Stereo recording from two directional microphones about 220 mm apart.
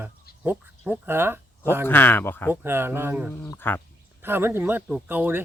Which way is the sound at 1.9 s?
10° left (ahead or behind).